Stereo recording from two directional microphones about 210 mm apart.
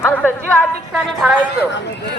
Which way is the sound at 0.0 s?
10° left (ahead or behind).